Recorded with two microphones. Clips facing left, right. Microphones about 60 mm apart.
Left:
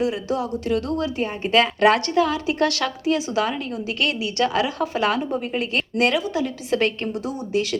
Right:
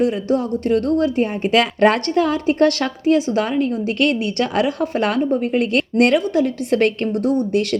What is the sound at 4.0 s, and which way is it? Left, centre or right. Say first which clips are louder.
A woman's voice: right 3 dB; right.